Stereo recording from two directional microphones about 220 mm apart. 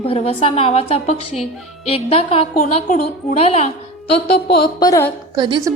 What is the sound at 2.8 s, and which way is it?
Speech, 35° left (ahead or behind).